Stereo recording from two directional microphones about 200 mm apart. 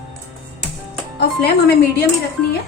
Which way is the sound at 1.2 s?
55° left (ahead or behind).